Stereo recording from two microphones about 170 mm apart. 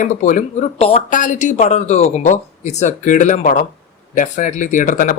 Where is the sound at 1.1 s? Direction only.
45° left (ahead or behind).